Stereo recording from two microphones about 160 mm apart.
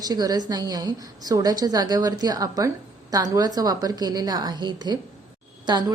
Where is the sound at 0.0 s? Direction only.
25° right (ahead or behind).